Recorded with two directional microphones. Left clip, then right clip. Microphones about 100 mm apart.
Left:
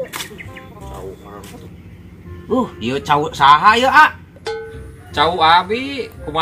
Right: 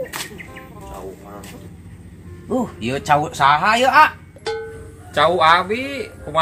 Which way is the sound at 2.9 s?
35° right (ahead or behind).